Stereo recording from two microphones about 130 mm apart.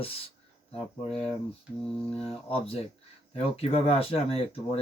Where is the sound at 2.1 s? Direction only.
45° left (ahead or behind).